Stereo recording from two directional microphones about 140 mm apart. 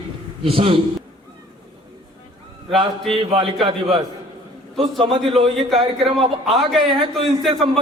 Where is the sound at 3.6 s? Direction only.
40° right (ahead or behind).